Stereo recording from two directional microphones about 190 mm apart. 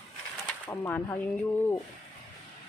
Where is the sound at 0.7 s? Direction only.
15° left (ahead or behind).